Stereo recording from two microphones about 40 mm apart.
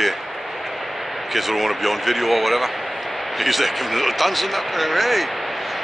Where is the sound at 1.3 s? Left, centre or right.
Centre.